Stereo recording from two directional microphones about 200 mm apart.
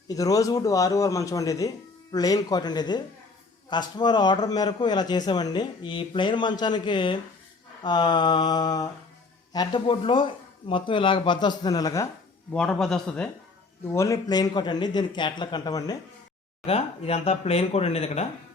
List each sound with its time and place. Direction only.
0.1 s a man's voice: 15° left (ahead or behind)
12.5 s a man's voice: 5° left (ahead or behind)
13.9 s a man's voice: 15° left (ahead or behind)
16.6 s speech: 30° left (ahead or behind)